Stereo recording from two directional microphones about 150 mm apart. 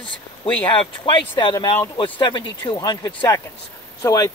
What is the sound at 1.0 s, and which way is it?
Speech, 35° left (ahead or behind).